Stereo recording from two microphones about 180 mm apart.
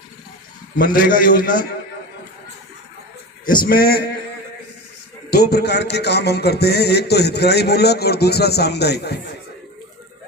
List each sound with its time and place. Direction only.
0.9 s a man's voice: 50° left (ahead or behind)
3.4 s a man's voice: 50° left (ahead or behind)
5.3 s a man's voice: 65° left (ahead or behind)